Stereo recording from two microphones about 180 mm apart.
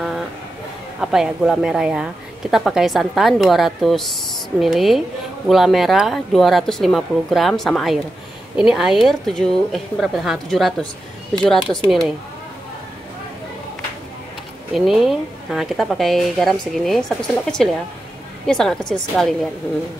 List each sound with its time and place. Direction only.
1.0 s a woman's voice: 5° right (ahead or behind)
14.9 s a woman's voice: centre (ahead or behind)